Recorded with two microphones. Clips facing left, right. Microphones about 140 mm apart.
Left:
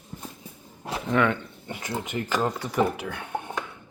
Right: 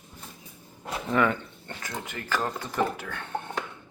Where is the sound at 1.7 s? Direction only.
20° left (ahead or behind).